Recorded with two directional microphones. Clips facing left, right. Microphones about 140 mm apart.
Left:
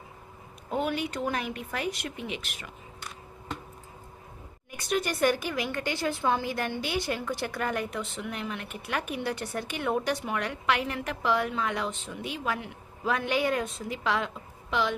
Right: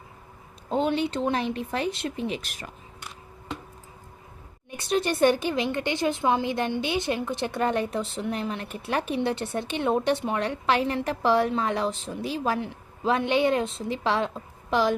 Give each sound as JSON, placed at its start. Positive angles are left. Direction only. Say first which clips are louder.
{"t": 0.7, "sound": "a woman's voice", "louder": "right 5 dB", "side_deg": -25}
{"t": 4.8, "sound": "a woman's voice", "louder": "right 4 dB", "side_deg": -30}